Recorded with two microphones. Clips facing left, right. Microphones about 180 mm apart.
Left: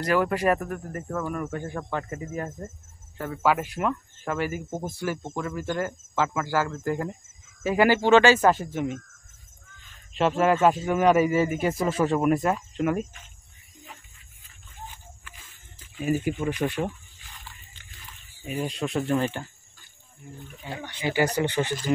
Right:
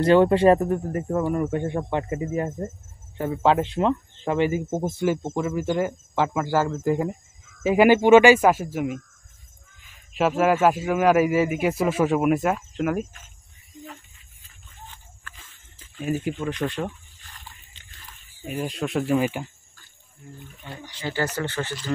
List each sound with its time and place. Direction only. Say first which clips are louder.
0.0 s speech: right 7 dB; 25° right (ahead or behind); by 9.0 s 5° right (ahead or behind)
10.1 s speech: right 2 dB; 5° right (ahead or behind)
16.0 s speech: left 1 dB; 5° left (ahead or behind)
18.5 s speech: right 1 dB; centre (ahead or behind)
20.7 s speech: left 5 dB; 60° left (ahead or behind)
21.0 s speech: left 3 dB; 15° left (ahead or behind)